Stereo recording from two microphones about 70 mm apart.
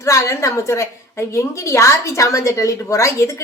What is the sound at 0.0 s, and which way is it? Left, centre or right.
A woman's voice, left.